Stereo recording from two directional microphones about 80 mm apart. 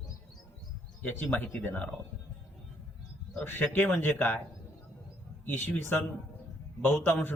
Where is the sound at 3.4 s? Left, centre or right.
Left.